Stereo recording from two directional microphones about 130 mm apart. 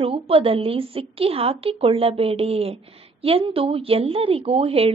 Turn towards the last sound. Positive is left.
turn(degrees=-50)  # may be behind; listen again after turning